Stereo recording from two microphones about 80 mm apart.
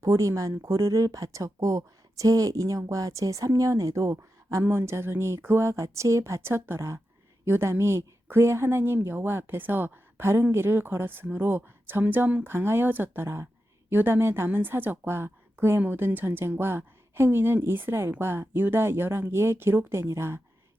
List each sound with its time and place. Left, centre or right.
0.0 s a woman's voice: right